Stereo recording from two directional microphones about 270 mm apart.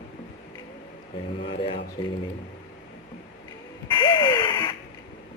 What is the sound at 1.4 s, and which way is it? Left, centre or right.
Speech, centre.